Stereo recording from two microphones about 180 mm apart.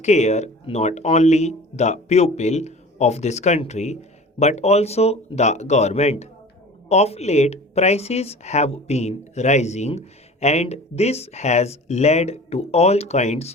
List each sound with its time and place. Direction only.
0.0 s speech: 40° left (ahead or behind)